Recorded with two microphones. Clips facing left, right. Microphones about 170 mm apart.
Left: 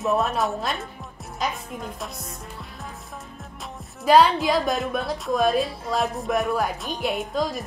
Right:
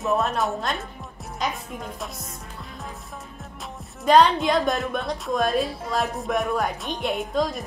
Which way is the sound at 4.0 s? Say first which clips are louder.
Even; 5° left (ahead or behind).